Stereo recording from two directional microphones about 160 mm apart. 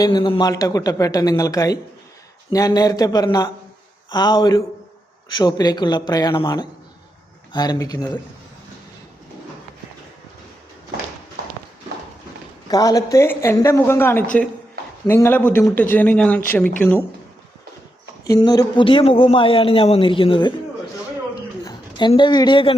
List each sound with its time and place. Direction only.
0.0 s speech: 25° left (ahead or behind)
12.6 s a woman's voice: 25° left (ahead or behind)
18.3 s a man's voice: 25° left (ahead or behind)
21.3 s a sound: 25° left (ahead or behind)